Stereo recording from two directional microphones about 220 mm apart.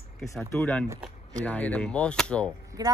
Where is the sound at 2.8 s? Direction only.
15° right (ahead or behind).